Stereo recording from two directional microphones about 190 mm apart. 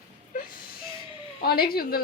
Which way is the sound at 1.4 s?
50° left (ahead or behind).